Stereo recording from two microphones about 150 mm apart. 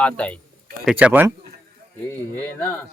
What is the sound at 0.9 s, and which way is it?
Speech, 10° right (ahead or behind).